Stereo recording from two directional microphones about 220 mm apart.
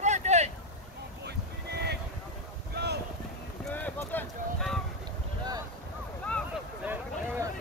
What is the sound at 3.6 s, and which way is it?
Boat, 10° left (ahead or behind).